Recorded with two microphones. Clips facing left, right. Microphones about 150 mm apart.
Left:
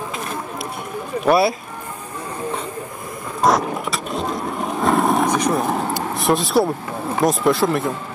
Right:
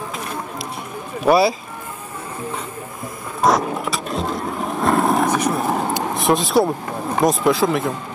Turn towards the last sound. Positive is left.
turn(degrees=0)  # may be behind; listen again after turning